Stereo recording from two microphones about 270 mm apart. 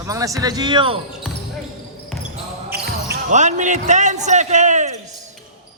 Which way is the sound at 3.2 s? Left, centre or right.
Right.